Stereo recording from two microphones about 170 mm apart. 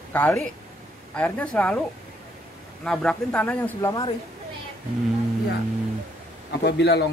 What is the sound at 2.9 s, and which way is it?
Speech, centre (ahead or behind).